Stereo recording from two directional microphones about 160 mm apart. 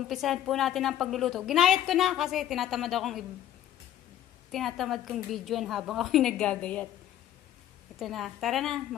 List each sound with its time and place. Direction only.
0.1 s a woman's voice: centre (ahead or behind)
4.5 s a woman's voice: centre (ahead or behind)
8.0 s a woman's voice: centre (ahead or behind)